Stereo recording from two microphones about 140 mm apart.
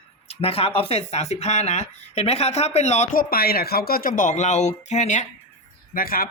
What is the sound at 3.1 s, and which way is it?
Speech, 90° left.